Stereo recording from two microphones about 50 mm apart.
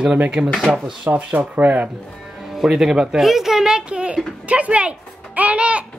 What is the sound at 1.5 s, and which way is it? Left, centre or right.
Speech, right.